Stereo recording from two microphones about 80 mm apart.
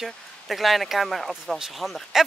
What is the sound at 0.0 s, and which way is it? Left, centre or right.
Speech, centre.